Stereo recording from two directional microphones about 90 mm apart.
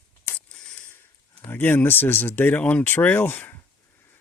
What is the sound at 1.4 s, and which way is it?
Speech, 25° left (ahead or behind).